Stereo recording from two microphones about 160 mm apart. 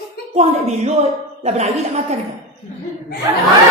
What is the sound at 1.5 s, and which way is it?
Speech, 45° right (ahead or behind).